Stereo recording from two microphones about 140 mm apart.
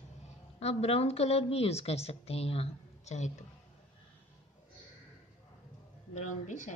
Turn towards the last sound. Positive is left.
turn(degrees=60)  # may be behind; listen again after turning